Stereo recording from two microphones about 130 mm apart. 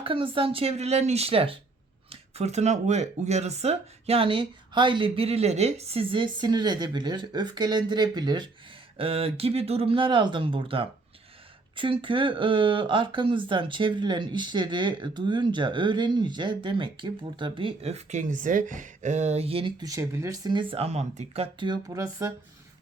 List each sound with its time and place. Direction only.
0.0 s speech: 45° right (ahead or behind)
9.0 s speech: 45° right (ahead or behind)
19.8 s speech: 25° right (ahead or behind); by 21.7 s 50° right (ahead or behind)
21.7 s speech: 25° right (ahead or behind)